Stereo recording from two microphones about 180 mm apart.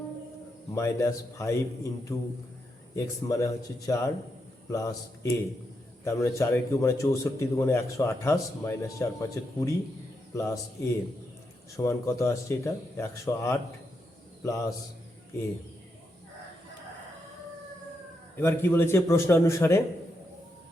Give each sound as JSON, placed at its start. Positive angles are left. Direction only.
{"t": 0.7, "sound": "a man's voice", "side_deg": 15}
{"t": 11.8, "sound": "a man's voice", "side_deg": 15}
{"t": 18.3, "sound": "a man's voice", "side_deg": 10}